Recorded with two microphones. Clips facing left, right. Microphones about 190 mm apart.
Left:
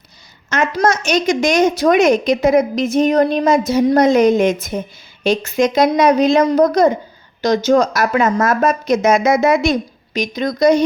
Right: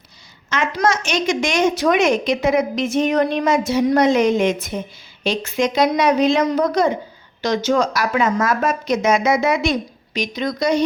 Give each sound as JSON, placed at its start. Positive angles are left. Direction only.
{"t": 0.5, "sound": "a woman's voice", "side_deg": 45}